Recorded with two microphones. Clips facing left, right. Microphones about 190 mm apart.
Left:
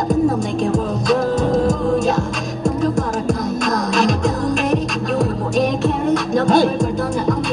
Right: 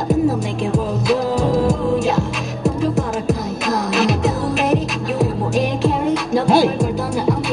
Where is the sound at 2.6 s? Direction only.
5° right (ahead or behind).